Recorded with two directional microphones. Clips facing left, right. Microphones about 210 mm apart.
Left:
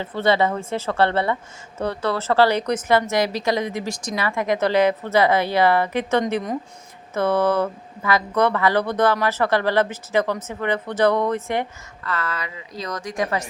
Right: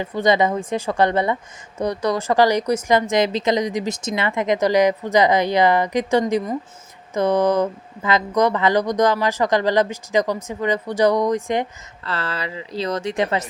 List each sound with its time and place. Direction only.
0.0 s speech: 15° right (ahead or behind)
12.0 s speech: 30° right (ahead or behind)